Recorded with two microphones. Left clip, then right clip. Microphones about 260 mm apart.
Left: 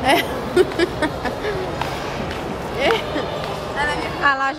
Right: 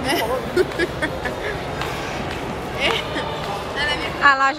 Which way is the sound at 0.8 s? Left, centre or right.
Left.